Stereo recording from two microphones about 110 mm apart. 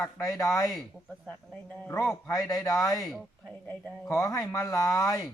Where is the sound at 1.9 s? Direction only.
25° left (ahead or behind).